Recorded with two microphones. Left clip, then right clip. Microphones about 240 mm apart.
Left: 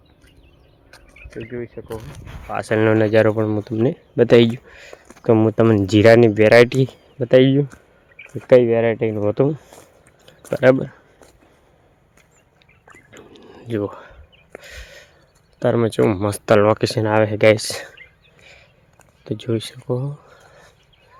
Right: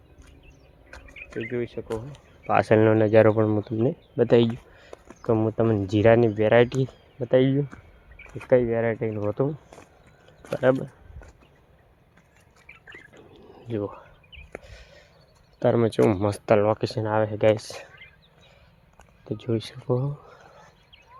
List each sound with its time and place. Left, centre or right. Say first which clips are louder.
0.9 s a sound: right 2 dB; centre
2.5 s speech: right 4 dB; right
2.8 s speech: left 7 dB; centre
3.8 s speech: left 9 dB; left
13.1 s whispering: left 6 dB; left
14.6 s a sound: left 10 dB; left
15.5 s speech: left 3 dB; centre
16.5 s speech: left 7 dB; left
19.2 s speech: left 5 dB; left